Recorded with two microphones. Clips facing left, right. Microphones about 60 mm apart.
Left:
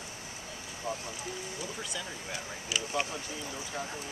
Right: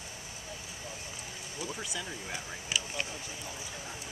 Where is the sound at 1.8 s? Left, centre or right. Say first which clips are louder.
Even; centre.